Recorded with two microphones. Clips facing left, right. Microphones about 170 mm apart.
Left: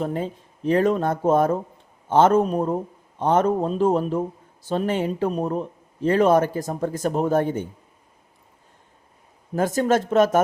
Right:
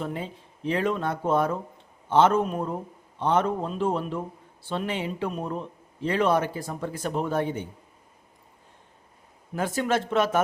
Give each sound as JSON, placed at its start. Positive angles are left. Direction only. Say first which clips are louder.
{"t": 0.0, "sound": "speech", "louder": "left 6 dB", "side_deg": 45}
{"t": 9.6, "sound": "speech", "louder": "left 6 dB", "side_deg": 45}